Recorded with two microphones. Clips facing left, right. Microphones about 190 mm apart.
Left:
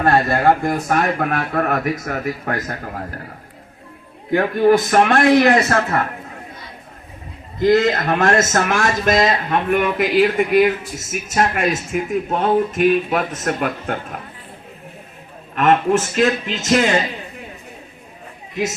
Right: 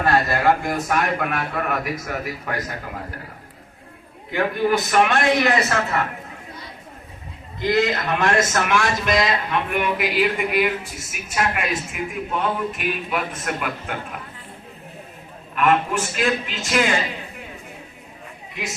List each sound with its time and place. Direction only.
0.0 s a man's voice: 55° left (ahead or behind)
0.7 s a man's voice: 40° left (ahead or behind)
4.3 s a man's voice: 50° left (ahead or behind)
7.6 s a man's voice: 50° left (ahead or behind)
15.5 s a man's voice: 40° left (ahead or behind)